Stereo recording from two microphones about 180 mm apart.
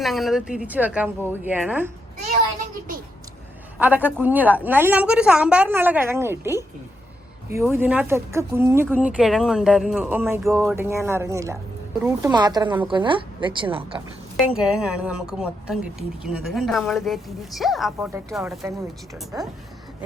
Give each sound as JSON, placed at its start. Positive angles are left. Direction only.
{"t": 0.0, "sound": "speech", "side_deg": 0}
{"t": 3.8, "sound": "speech", "side_deg": -10}
{"t": 12.3, "sound": "a woman's voice", "side_deg": -25}
{"t": 14.4, "sound": "speech", "side_deg": -5}
{"t": 18.6, "sound": "speech", "side_deg": -15}